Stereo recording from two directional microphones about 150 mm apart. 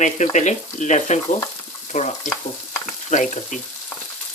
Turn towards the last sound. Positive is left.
turn(degrees=55)  # may be behind; listen again after turning